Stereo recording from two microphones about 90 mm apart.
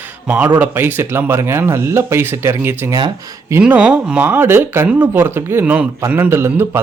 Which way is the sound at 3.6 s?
10° right (ahead or behind).